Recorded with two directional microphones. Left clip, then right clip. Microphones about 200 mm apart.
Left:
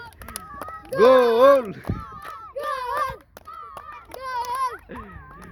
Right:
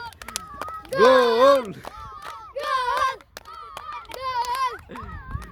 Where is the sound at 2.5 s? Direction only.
Centre (ahead or behind).